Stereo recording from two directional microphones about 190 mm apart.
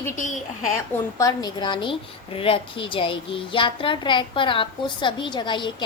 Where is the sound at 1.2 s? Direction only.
20° left (ahead or behind).